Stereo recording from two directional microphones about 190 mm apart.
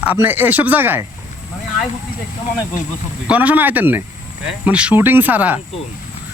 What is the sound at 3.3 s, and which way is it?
Speech, 10° right (ahead or behind).